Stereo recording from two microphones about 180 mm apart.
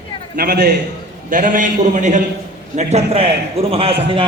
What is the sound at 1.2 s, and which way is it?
A man's voice, 45° right (ahead or behind).